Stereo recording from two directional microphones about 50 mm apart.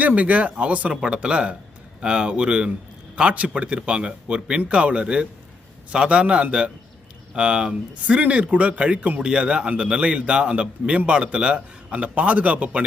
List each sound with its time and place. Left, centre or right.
0.0 s speech: right